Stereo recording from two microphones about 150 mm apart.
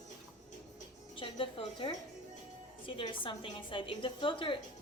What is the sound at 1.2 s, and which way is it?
A woman's voice, 35° left (ahead or behind).